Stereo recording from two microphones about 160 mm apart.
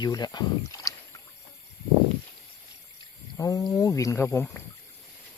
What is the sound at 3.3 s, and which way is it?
Speech, 20° left (ahead or behind).